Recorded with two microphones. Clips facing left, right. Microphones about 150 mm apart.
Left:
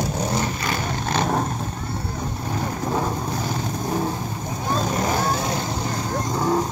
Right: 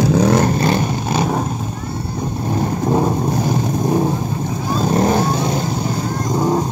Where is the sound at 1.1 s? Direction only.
5° right (ahead or behind).